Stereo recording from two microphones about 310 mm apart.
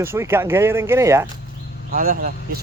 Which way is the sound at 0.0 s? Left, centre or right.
Centre.